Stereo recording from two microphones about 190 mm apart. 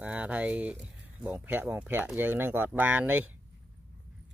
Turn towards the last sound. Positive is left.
turn(degrees=-10)  # may be behind; listen again after turning